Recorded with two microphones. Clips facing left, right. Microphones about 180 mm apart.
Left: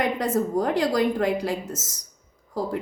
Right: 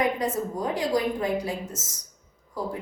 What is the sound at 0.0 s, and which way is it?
A woman's voice, 75° left (ahead or behind).